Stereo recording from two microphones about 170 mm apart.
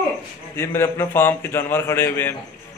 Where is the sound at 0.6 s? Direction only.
15° left (ahead or behind).